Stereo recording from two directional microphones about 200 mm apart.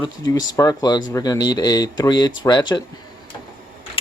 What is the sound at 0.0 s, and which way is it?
Speech, 20° left (ahead or behind).